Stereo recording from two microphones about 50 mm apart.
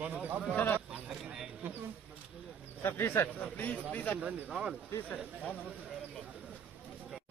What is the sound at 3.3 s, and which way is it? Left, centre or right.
Speech, left.